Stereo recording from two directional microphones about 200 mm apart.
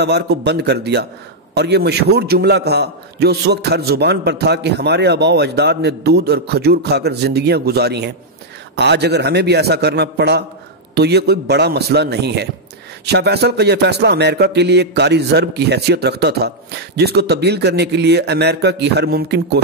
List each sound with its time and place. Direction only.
0.0 s a man's voice: 55° right (ahead or behind)